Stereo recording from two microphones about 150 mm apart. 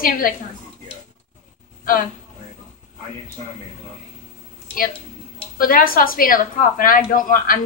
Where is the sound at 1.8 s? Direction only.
70° left (ahead or behind).